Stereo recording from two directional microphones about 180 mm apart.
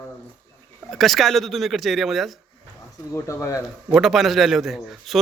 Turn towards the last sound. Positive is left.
turn(degrees=0)  # may be behind; listen again after turning